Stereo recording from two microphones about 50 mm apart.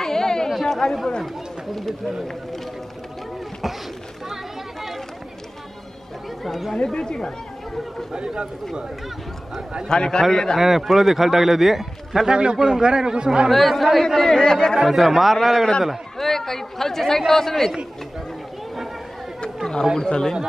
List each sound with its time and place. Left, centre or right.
0.0 s a sound: centre
0.5 s chatter: centre
1.8 s a man's voice: centre
6.4 s a man's voice: centre
6.8 s speech: centre
8.1 s speech: centre
9.8 s a woman's voice: centre
10.6 s a man's voice: centre
13.5 s a man's voice: centre
14.8 s a man's voice: centre
19.4 s wild animals: centre
20.0 s a woman's voice: centre